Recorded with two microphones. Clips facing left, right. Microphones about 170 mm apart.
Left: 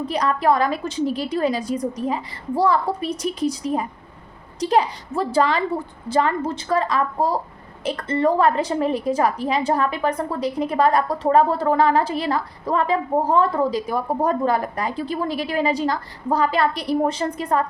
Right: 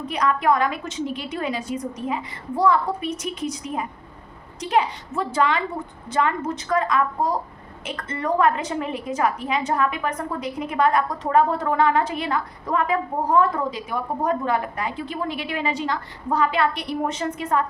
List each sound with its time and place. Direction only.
0.0 s a woman's voice: 35° left (ahead or behind)